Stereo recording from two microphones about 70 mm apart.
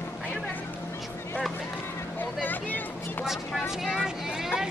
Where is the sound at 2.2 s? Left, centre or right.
Left.